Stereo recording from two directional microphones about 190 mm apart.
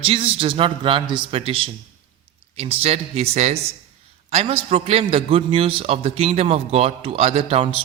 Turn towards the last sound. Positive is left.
turn(degrees=-30)  # may be behind; listen again after turning